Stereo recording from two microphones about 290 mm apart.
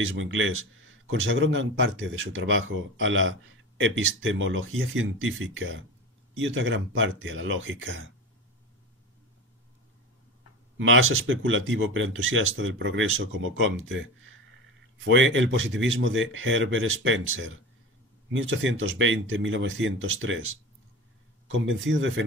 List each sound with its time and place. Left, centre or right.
0.0 s a man's voice: right
10.8 s speech: right
15.0 s a man's voice: right